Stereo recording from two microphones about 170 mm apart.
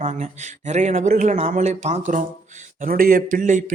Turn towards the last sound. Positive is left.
turn(degrees=-50)  # may be behind; listen again after turning